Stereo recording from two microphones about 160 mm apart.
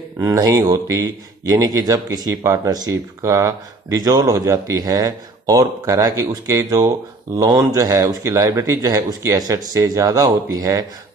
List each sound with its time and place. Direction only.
0.2 s a man's voice: 20° right (ahead or behind)